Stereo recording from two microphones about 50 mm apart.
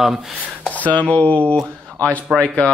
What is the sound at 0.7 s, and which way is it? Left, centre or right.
Speech, left.